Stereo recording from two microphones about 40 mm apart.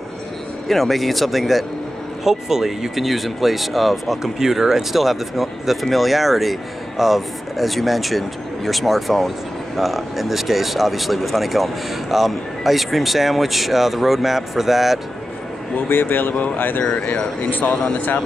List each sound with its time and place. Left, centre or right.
0.7 s speech: centre
15.9 s speech: left
16.9 s speech: left